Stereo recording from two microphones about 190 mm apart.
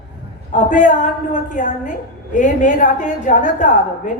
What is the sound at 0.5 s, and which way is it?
A woman's voice, 40° left (ahead or behind).